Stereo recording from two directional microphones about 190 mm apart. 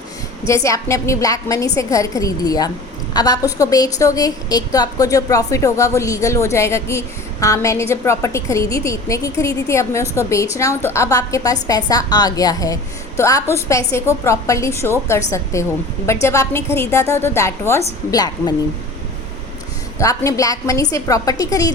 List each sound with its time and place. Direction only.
0.4 s a woman's voice: 15° left (ahead or behind)
20.0 s a woman's voice: 15° left (ahead or behind)